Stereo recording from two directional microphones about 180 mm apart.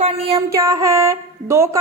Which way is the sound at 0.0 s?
35° right (ahead or behind).